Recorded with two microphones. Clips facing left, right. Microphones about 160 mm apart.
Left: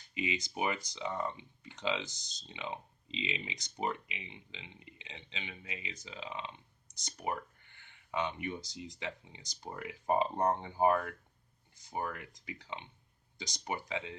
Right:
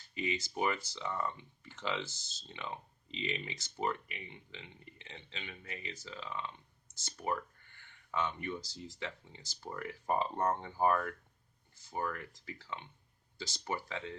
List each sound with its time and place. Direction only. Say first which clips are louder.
0.0 s speech: even; 15° left (ahead or behind)